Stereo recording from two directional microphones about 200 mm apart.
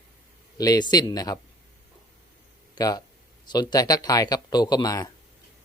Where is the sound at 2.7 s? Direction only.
20° left (ahead or behind).